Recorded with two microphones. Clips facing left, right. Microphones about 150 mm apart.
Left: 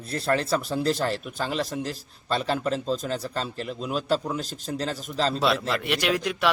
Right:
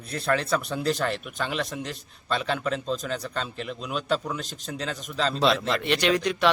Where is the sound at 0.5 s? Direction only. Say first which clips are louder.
Left 1 dB; centre (ahead or behind).